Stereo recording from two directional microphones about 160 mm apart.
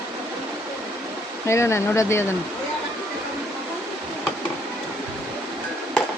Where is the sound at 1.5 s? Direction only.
15° left (ahead or behind).